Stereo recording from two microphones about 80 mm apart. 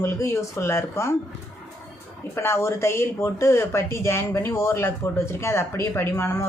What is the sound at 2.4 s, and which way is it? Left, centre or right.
Speech, left.